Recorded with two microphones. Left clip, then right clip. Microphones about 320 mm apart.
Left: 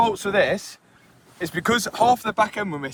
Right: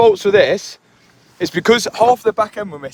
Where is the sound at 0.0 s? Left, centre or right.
Right.